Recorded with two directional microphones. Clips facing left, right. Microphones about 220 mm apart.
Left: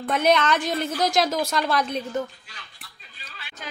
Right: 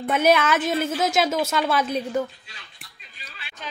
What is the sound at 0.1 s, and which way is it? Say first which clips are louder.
Speech: right 1 dB; 5° right (ahead or behind).